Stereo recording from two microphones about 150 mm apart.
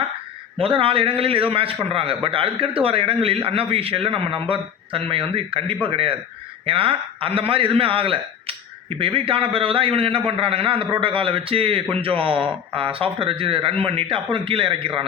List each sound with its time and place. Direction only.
0.6 s a man's voice: 35° right (ahead or behind)